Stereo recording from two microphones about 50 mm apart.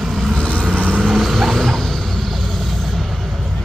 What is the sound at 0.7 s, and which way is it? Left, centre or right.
Vehicle, right.